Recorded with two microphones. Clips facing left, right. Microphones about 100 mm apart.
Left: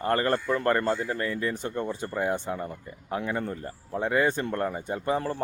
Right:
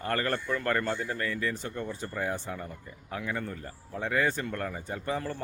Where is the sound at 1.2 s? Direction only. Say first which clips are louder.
Left 3 dB; 25° left (ahead or behind).